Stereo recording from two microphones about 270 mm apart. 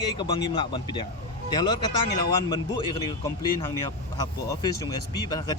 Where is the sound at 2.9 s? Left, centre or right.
Centre.